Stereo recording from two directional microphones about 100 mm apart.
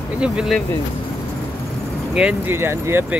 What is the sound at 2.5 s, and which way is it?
Speech, 25° right (ahead or behind).